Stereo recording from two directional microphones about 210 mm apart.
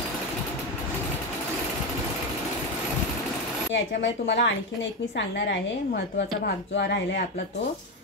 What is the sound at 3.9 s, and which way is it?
A woman's voice, 55° left (ahead or behind).